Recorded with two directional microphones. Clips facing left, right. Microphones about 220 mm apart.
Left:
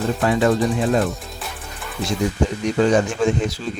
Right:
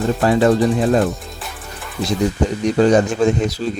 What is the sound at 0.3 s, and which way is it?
Speech, 40° right (ahead or behind).